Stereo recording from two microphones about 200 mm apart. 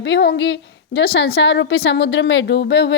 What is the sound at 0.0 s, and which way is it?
A woman's voice, 55° left (ahead or behind).